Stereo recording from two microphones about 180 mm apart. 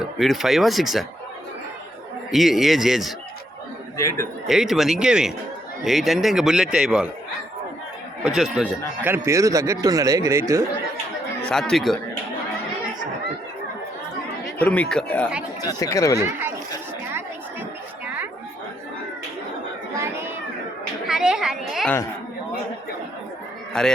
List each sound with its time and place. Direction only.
0.0 s speech: centre (ahead or behind)
2.3 s speech: centre (ahead or behind)
3.9 s speech: 15° left (ahead or behind)
4.4 s speech: centre (ahead or behind)
8.2 s a man's voice: 5° right (ahead or behind)
11.4 s speech: 5° left (ahead or behind)
14.6 s speech: 5° left (ahead or behind)
15.6 s speech: 20° left (ahead or behind)
16.2 s speech: 10° right (ahead or behind)
18.0 s chatter: 10° right (ahead or behind)
21.1 s a sound: centre (ahead or behind)
23.7 s speech: 5° left (ahead or behind)